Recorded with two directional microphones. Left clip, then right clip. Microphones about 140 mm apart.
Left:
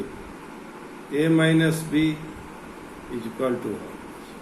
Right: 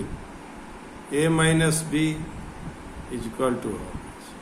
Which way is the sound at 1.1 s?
90° right.